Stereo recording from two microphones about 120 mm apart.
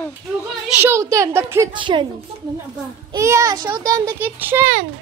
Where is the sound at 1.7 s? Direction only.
40° right (ahead or behind).